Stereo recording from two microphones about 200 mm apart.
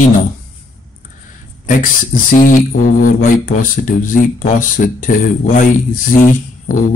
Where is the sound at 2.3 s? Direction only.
40° left (ahead or behind).